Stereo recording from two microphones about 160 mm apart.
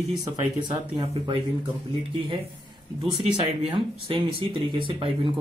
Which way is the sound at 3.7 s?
30° right (ahead or behind).